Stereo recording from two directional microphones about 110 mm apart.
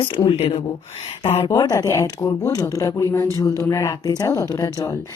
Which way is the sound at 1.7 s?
30° left (ahead or behind).